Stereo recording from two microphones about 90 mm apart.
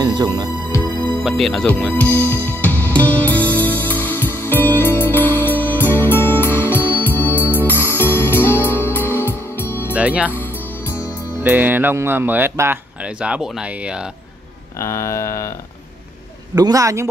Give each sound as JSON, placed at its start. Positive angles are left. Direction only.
{"t": 0.0, "sound": "music", "side_deg": -50}
{"t": 0.7, "sound": "music", "side_deg": 35}
{"t": 1.2, "sound": "speech", "side_deg": 5}
{"t": 2.0, "sound": "music", "side_deg": 20}
{"t": 9.9, "sound": "speech", "side_deg": -15}
{"t": 13.0, "sound": "speech", "side_deg": -10}
{"t": 14.8, "sound": "speech", "side_deg": 30}
{"t": 16.5, "sound": "a man's voice", "side_deg": -45}